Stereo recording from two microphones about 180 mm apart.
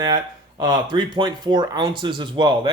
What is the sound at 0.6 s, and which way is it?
Speech, 25° right (ahead or behind).